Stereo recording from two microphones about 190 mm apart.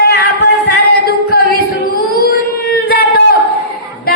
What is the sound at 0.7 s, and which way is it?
Music, 55° left (ahead or behind).